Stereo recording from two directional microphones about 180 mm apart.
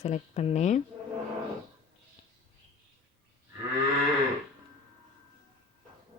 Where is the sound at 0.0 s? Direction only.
40° left (ahead or behind).